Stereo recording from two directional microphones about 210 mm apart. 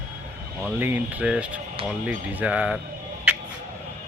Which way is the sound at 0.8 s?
10° right (ahead or behind).